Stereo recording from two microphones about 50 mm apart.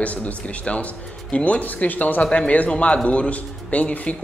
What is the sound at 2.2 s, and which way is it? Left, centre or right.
Speech, left.